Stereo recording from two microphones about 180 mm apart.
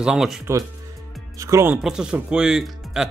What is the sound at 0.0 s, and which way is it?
Speech, 5° right (ahead or behind).